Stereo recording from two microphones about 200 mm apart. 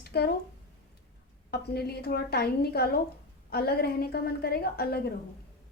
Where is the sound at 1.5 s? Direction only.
55° left (ahead or behind).